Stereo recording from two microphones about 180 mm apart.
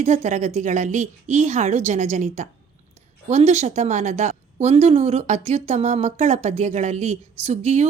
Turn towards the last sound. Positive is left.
turn(degrees=-40)  # may be behind; listen again after turning